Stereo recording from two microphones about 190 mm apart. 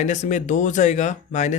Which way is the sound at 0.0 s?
40° left (ahead or behind).